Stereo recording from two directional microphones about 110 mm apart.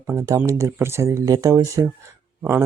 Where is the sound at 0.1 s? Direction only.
25° right (ahead or behind).